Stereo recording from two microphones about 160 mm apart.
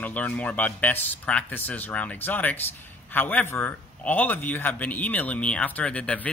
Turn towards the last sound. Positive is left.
turn(degrees=10)  # may be behind; listen again after turning